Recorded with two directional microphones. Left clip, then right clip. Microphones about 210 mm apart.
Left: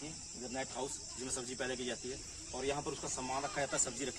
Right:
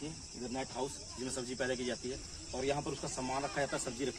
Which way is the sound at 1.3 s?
15° right (ahead or behind).